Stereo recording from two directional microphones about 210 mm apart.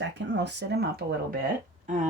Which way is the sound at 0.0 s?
55° right (ahead or behind).